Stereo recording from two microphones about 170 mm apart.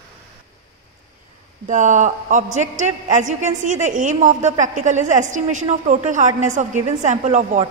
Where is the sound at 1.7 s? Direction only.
45° right (ahead or behind).